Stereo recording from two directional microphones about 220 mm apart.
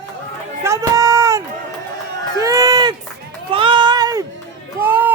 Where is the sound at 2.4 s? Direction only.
15° right (ahead or behind).